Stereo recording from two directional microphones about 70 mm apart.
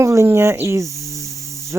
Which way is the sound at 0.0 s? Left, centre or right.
Right.